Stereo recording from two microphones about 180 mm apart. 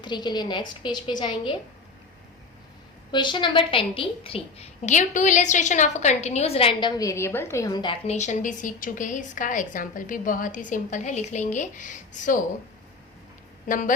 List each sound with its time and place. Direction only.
0.0 s a woman's voice: 25° left (ahead or behind)
3.1 s a woman's voice: 25° left (ahead or behind)
8.0 s a woman's voice: 40° left (ahead or behind)
13.7 s a woman's voice: 50° left (ahead or behind)